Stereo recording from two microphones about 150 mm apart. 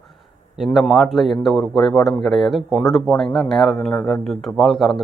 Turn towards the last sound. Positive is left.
turn(degrees=0)  # may be behind; listen again after turning